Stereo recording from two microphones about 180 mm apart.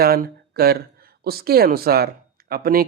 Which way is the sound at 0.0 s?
60° right (ahead or behind).